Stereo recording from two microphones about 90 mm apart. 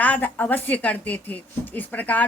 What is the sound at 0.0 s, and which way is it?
Speech, 15° left (ahead or behind).